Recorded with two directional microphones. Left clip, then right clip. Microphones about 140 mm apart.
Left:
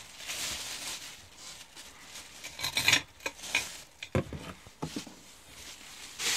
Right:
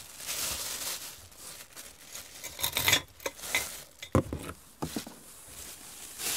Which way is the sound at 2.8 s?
45° right (ahead or behind).